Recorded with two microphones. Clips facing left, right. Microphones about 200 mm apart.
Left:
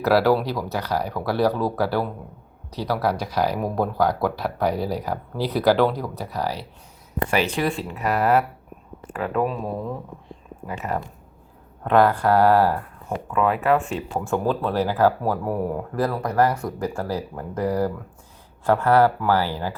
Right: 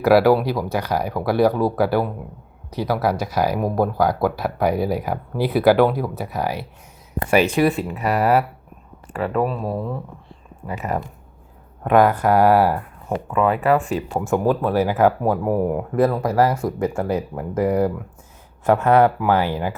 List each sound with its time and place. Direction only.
0.0 s speech: 10° right (ahead or behind)
7.2 s speech: 45° right (ahead or behind)
7.5 s speech: 10° right (ahead or behind)
13.3 s speech: centre (ahead or behind)
14.3 s speech: 15° right (ahead or behind)